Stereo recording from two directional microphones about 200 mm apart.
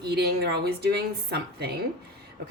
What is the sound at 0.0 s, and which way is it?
A woman's voice, 55° right (ahead or behind).